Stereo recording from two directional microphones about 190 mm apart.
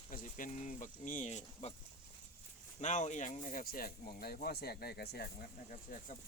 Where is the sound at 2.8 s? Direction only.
40° left (ahead or behind).